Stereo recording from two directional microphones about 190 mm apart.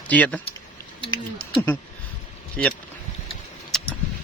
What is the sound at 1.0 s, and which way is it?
Speech, 25° left (ahead or behind).